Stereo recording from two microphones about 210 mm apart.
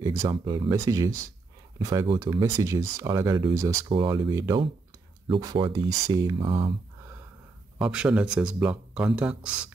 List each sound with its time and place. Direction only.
0.0 s speech: 20° right (ahead or behind)
7.8 s speech: 5° right (ahead or behind)